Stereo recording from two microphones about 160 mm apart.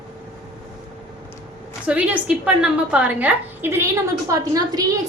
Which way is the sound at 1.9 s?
10° right (ahead or behind).